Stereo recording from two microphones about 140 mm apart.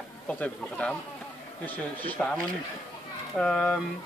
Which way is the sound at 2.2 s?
5° left (ahead or behind).